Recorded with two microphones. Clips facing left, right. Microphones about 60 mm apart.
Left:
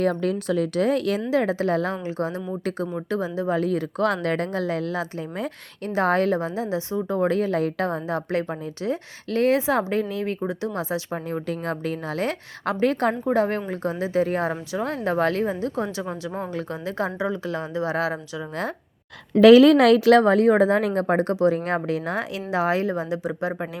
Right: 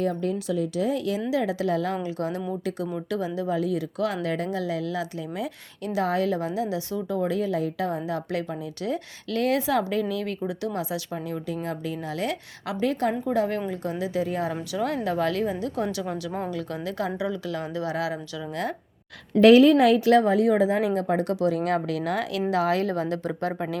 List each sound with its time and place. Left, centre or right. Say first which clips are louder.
0.0 s a woman's voice: left 3 dB; left
0.3 s speech: left 3 dB; left
1.3 s a woman's voice: left 3 dB; left
3.6 s speech: left 3 dB; left
7.2 s a woman's voice: left 4 dB; left
14.7 s a woman's voice: left 1 dB; left
19.3 s speech: left 3 dB; left; by 23.6 s centre